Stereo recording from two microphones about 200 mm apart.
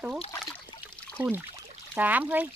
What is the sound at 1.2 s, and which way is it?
Speech, 15° right (ahead or behind).